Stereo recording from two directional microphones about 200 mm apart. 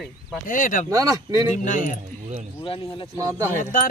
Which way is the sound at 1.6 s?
40° left (ahead or behind).